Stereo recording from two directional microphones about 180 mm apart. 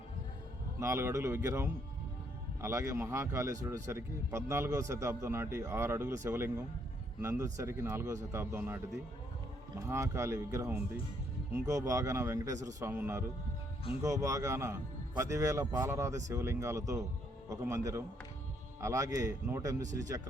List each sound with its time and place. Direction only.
0.8 s speech: 15° right (ahead or behind)